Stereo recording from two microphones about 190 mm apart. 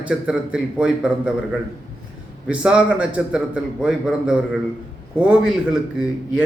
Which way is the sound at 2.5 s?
5° right (ahead or behind).